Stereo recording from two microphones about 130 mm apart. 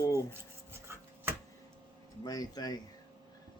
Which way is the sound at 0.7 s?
15° right (ahead or behind).